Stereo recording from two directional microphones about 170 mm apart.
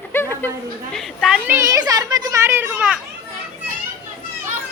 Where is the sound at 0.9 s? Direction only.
Centre (ahead or behind).